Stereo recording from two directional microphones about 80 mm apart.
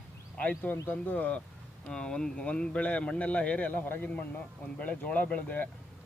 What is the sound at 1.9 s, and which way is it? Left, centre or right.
Speech, centre.